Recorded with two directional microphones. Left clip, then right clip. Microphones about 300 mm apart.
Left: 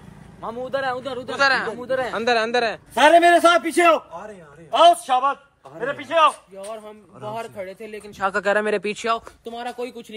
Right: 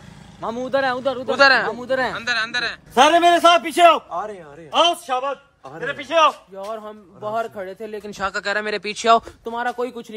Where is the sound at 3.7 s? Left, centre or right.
Centre.